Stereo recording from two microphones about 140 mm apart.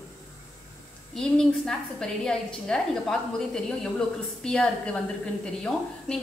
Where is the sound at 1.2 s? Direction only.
5° left (ahead or behind).